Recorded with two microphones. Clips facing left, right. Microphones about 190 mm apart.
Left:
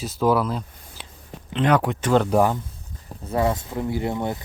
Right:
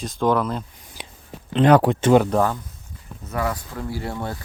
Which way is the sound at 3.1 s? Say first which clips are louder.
Left 4 dB; 30° left (ahead or behind).